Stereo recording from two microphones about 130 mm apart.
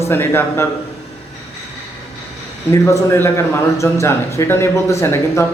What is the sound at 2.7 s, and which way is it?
Speech, 20° left (ahead or behind).